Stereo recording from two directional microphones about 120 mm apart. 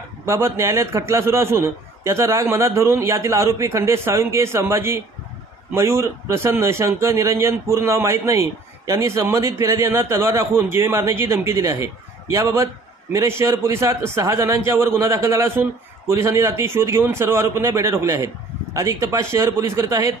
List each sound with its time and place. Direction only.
0.2 s a man's voice: 20° right (ahead or behind)